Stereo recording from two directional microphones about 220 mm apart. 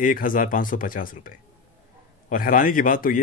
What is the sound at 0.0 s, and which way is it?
Speech, 40° left (ahead or behind).